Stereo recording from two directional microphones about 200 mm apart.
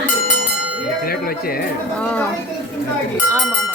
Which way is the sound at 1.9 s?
5° left (ahead or behind).